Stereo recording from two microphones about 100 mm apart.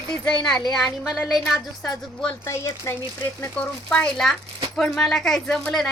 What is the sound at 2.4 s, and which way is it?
Speech, 30° left (ahead or behind).